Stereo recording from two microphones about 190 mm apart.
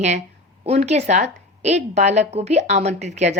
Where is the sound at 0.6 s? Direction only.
35° right (ahead or behind).